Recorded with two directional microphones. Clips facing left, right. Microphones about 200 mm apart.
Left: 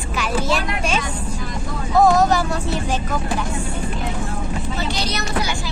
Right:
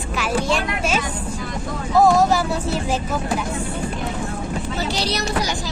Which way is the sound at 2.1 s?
5° right (ahead or behind).